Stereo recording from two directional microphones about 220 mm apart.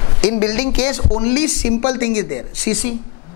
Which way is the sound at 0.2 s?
10° left (ahead or behind).